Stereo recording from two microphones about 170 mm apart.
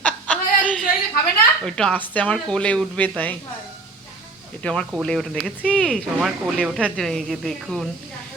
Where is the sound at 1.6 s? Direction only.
5° left (ahead or behind).